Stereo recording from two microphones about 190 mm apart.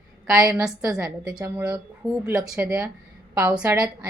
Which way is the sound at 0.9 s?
5° right (ahead or behind).